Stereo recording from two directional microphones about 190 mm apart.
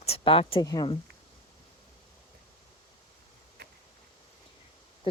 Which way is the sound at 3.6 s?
60° right (ahead or behind).